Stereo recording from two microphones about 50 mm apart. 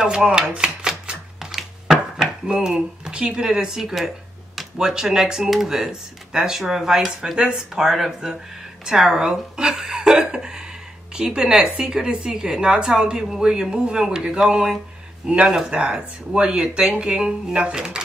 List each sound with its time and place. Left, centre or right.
0.0 s a woman's voice: centre
0.6 s typewriter: centre
1.5 s dishes: centre
4.7 s a woman's voice: centre